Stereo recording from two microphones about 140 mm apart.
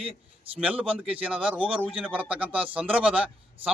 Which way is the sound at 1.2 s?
10° right (ahead or behind).